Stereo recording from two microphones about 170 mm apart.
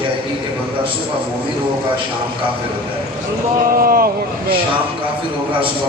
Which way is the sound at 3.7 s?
60° right (ahead or behind).